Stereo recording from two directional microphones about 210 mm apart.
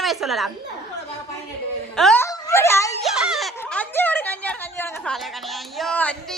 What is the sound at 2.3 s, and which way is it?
Wail, 15° left (ahead or behind).